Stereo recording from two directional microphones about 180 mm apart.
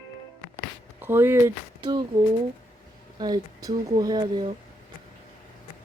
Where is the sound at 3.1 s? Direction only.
20° right (ahead or behind).